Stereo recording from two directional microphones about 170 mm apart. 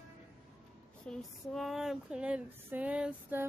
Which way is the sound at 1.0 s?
Centre (ahead or behind).